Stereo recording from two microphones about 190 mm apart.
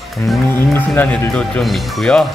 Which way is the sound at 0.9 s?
10° left (ahead or behind).